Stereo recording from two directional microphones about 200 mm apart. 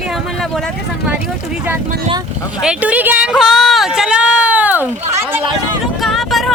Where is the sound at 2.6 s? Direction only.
5° right (ahead or behind).